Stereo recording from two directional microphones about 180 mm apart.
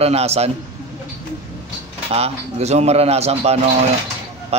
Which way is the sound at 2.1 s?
35° right (ahead or behind).